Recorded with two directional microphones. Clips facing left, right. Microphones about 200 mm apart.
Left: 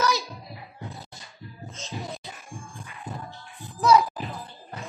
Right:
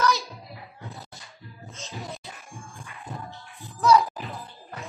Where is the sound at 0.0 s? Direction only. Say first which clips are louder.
Right 1 dB; 15° left (ahead or behind).